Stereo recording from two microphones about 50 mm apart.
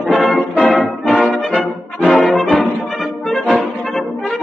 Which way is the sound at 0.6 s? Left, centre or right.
Centre.